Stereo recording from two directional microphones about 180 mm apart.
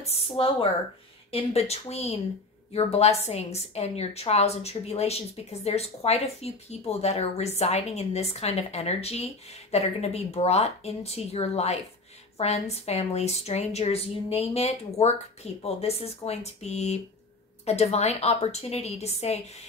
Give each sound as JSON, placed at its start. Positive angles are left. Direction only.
{"t": 0.0, "sound": "a woman's voice", "side_deg": 35}